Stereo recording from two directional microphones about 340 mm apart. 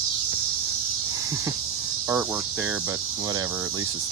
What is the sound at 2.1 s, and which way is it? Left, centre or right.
Speech, centre.